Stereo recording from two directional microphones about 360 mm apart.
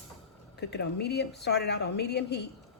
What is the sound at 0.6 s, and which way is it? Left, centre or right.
Speech, left.